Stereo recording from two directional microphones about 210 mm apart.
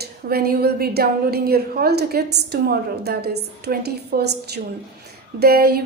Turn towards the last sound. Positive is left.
turn(degrees=-50)  # may be behind; listen again after turning